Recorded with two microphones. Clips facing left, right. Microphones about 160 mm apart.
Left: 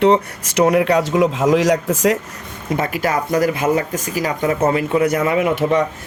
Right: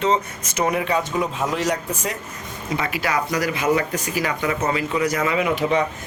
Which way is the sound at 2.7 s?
45° left (ahead or behind).